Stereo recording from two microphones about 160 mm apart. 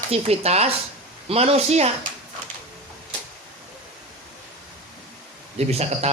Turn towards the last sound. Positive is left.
turn(degrees=-40)  # may be behind; listen again after turning